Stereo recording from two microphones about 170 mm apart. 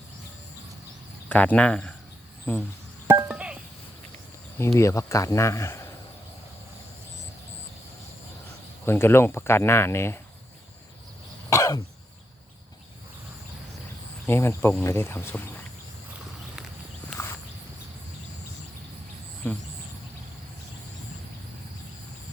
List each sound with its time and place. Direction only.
1.3 s speech: 10° left (ahead or behind)
3.1 s a sound: 10° right (ahead or behind)
4.5 s speech: 15° left (ahead or behind)
8.8 s speech: 15° left (ahead or behind)
11.4 s cough: 15° left (ahead or behind)
14.3 s speech: 15° left (ahead or behind)
17.1 s walk: centre (ahead or behind)
19.4 s speech: 10° left (ahead or behind)